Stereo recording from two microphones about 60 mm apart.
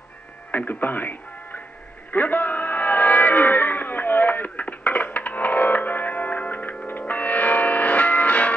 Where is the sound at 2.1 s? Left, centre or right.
Left.